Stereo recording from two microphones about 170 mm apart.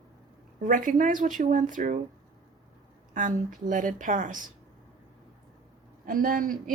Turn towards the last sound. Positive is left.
turn(degrees=-55)  # may be behind; listen again after turning